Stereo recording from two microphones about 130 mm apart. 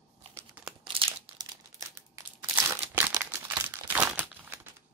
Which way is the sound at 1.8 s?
20° right (ahead or behind).